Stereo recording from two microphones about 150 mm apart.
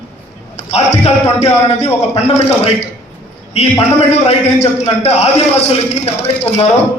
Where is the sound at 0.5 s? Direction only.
45° left (ahead or behind).